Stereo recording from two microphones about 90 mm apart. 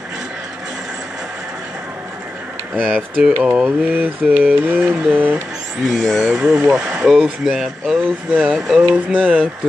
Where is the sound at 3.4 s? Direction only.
10° right (ahead or behind).